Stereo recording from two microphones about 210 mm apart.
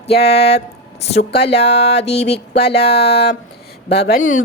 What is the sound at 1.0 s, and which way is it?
Speech, 30° left (ahead or behind).